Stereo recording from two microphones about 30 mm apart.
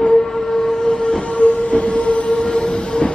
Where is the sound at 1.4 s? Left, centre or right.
Left.